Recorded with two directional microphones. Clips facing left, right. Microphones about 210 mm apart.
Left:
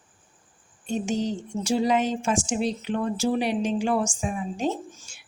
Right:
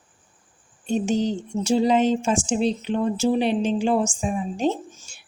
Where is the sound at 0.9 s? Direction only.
30° right (ahead or behind).